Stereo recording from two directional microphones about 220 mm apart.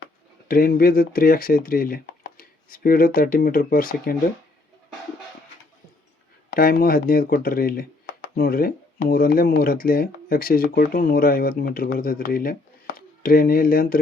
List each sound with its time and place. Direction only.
0.4 s speech: 40° left (ahead or behind)
6.5 s speech: 40° left (ahead or behind)